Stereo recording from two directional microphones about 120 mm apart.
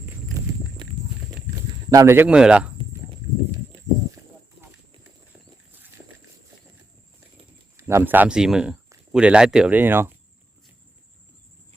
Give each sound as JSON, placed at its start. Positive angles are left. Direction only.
{"t": 0.4, "sound": "clip-clop", "side_deg": -30}
{"t": 1.9, "sound": "speech", "side_deg": -30}
{"t": 2.1, "sound": "speech", "side_deg": -10}
{"t": 7.8, "sound": "speech", "side_deg": -25}